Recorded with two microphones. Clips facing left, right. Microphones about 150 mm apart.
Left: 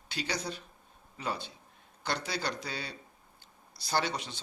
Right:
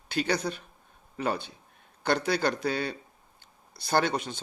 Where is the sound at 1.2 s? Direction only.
55° right (ahead or behind).